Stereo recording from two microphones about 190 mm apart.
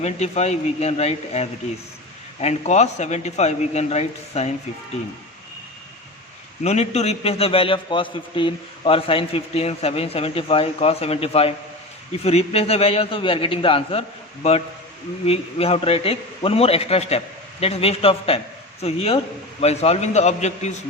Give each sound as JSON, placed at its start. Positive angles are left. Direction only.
{"t": 0.0, "sound": "a man's voice", "side_deg": 35}
{"t": 6.6, "sound": "a man's voice", "side_deg": 35}
{"t": 15.3, "sound": "a man's voice", "side_deg": 30}